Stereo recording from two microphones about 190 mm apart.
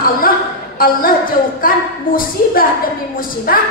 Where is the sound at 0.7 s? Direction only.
50° left (ahead or behind).